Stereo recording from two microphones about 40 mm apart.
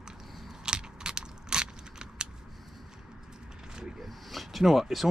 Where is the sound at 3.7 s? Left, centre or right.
Centre.